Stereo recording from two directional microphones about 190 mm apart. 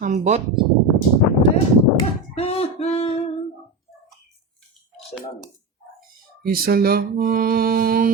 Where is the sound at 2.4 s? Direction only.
30° left (ahead or behind).